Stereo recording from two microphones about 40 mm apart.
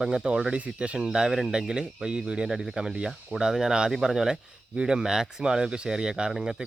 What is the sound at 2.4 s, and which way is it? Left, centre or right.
Speech, centre.